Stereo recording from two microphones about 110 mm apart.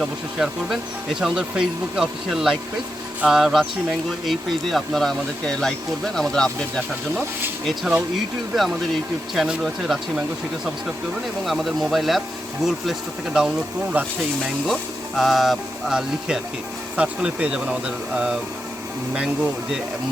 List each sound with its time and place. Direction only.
0.0 s speech: 5° right (ahead or behind)
9.3 s speech: centre (ahead or behind)
11.4 s speech: centre (ahead or behind)
14.0 s speech: 15° right (ahead or behind)
14.7 s speech: centre (ahead or behind)